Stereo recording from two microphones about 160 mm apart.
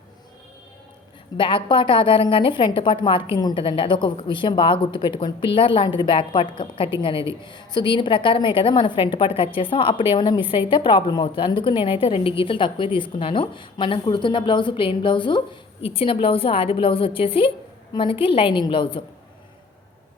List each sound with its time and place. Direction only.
1.4 s a woman's voice: 30° left (ahead or behind)